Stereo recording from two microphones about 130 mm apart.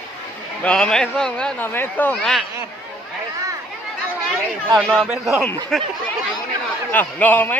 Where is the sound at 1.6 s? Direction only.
15° left (ahead or behind).